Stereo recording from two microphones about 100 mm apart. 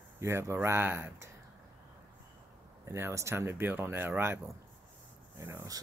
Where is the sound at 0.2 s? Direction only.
30° right (ahead or behind).